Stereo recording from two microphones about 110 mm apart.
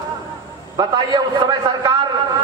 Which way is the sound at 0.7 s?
40° right (ahead or behind).